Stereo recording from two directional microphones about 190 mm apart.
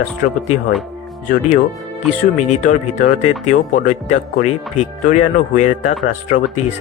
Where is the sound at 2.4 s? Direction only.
40° left (ahead or behind).